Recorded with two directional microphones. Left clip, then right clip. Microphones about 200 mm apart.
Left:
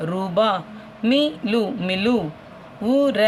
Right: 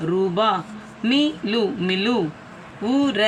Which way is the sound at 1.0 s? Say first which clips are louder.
Left 1 dB; 60° left (ahead or behind).